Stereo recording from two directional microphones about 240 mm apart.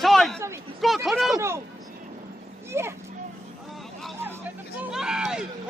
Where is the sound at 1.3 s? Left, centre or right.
Centre.